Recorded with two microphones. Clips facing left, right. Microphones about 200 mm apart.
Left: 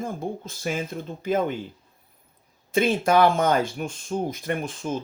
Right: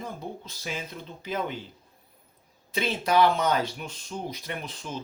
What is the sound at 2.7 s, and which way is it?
Speech, 50° left (ahead or behind).